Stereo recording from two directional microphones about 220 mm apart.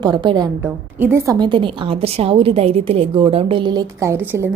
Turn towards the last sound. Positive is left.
turn(degrees=-10)  # may be behind; listen again after turning